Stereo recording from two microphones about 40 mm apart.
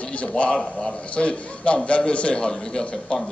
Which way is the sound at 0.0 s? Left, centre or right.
Left.